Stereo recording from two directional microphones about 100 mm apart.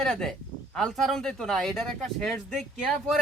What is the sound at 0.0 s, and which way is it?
Speech, 5° left (ahead or behind).